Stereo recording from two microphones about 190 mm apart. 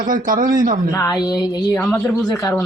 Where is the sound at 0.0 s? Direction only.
45° right (ahead or behind).